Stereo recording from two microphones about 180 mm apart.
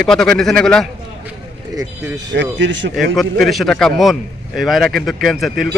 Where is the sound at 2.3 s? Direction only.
80° right.